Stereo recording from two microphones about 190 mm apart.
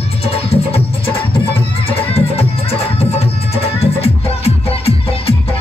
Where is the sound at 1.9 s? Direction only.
30° left (ahead or behind).